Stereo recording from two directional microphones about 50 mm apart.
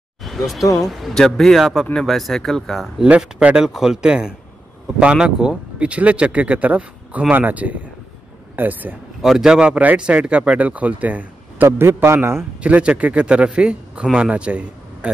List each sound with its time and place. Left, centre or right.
0.2 s speech: centre
3.7 s speech: centre; by 8.9 s right
9.2 s speech: centre; by 11.7 s right
11.8 s a man's voice: right
12.5 s a man's voice: right